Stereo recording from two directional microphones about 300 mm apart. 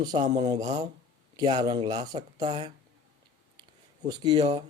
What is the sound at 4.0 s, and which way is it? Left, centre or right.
Speech, centre.